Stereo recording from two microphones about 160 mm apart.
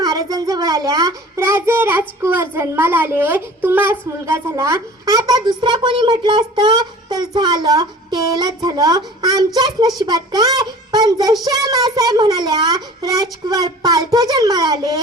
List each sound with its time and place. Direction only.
0.0 s a child's voice: 20° right (ahead or behind)